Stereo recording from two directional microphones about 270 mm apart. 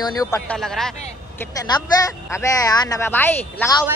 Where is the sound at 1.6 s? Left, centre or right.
Centre.